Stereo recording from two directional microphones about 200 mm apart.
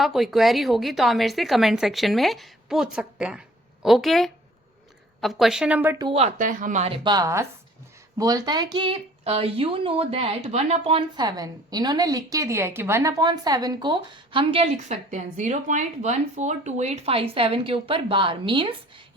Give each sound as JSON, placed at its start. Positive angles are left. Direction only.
{"t": 0.0, "sound": "a woman's voice", "side_deg": 0}
{"t": 6.0, "sound": "speech", "side_deg": -25}